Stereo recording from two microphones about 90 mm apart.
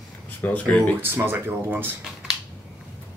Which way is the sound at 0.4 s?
15° left (ahead or behind).